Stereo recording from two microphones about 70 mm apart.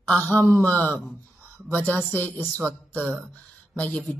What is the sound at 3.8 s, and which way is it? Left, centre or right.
Speech, centre.